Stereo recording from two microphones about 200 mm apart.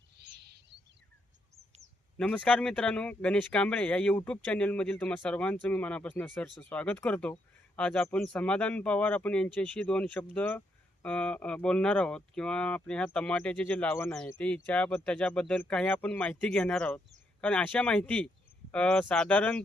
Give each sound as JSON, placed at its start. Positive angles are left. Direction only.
{"t": 0.2, "sound": "bird", "side_deg": -55}
{"t": 2.1, "sound": "speech", "side_deg": 5}